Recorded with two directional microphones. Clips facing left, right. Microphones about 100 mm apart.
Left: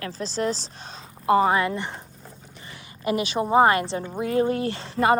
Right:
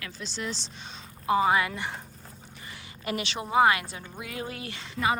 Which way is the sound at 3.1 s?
30° left (ahead or behind).